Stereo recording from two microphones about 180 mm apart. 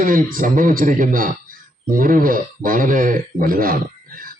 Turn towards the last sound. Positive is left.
turn(degrees=-55)  # may be behind; listen again after turning